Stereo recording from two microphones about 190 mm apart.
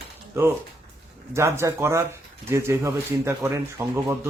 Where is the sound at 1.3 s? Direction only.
15° right (ahead or behind).